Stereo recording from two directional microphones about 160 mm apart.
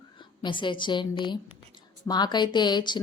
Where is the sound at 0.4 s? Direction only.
30° left (ahead or behind).